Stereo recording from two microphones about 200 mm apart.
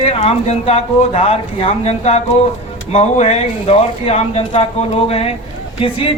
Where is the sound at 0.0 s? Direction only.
30° left (ahead or behind).